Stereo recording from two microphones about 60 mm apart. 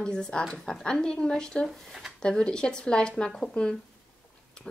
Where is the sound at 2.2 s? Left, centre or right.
Centre.